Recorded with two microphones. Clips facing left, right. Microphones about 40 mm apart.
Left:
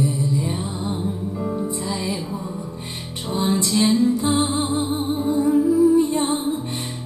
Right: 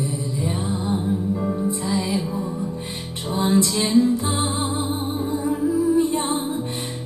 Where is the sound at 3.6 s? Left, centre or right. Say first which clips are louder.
Left 4 dB; centre.